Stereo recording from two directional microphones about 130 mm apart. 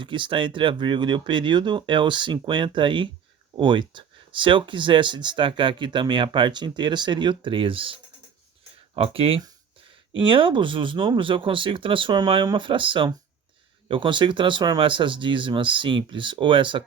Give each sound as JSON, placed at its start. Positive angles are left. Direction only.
{"t": 0.0, "sound": "speech", "side_deg": -40}
{"t": 9.0, "sound": "speech", "side_deg": -45}